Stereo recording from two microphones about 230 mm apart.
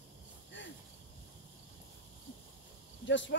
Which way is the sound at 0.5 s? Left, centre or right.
Left.